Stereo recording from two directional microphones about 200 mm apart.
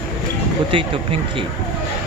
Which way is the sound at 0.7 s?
25° right (ahead or behind).